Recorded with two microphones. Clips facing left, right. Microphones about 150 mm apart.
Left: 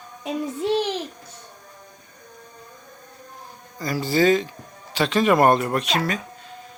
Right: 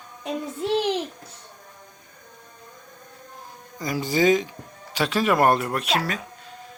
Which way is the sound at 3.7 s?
20° right (ahead or behind).